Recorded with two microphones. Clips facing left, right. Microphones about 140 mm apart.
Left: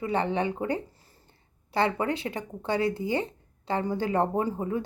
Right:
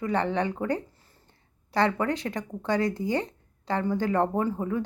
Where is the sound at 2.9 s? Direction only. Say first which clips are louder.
Right 1 dB; 5° left (ahead or behind).